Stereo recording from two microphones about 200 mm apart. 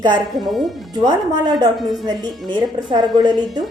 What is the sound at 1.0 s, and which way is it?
Speech, 20° right (ahead or behind).